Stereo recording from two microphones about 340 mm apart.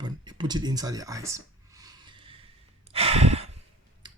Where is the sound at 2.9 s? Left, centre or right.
Centre.